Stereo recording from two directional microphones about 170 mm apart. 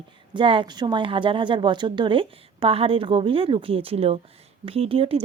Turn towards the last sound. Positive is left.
turn(degrees=-35)  # may be behind; listen again after turning